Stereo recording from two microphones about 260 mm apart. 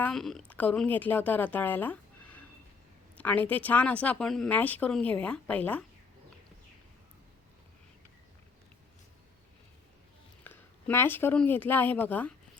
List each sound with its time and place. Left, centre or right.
0.0 s a woman's voice: centre
10.4 s speech: centre